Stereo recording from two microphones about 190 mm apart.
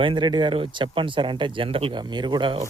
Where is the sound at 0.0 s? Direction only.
25° right (ahead or behind).